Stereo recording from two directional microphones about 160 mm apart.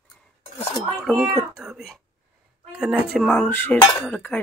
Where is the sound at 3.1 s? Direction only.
Centre (ahead or behind).